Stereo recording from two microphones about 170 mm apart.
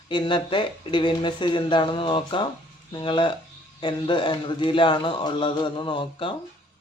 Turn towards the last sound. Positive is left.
turn(degrees=30)  # may be behind; listen again after turning